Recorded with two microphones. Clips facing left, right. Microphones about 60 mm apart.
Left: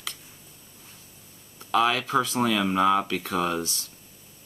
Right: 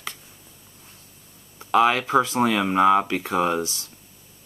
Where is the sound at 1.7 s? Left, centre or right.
Right.